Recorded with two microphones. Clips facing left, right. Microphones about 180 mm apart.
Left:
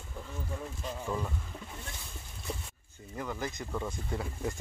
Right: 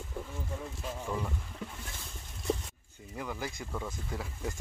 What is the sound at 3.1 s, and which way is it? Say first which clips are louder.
Speech: left 2 dB; 5° right (ahead or behind).